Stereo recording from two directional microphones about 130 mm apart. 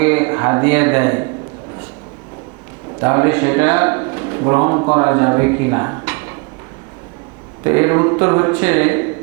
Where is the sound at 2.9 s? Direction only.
25° right (ahead or behind).